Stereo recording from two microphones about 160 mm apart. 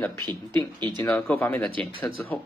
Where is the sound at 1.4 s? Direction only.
10° left (ahead or behind).